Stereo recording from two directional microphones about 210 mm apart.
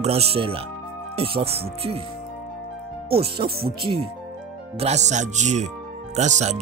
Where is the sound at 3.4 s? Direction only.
25° right (ahead or behind).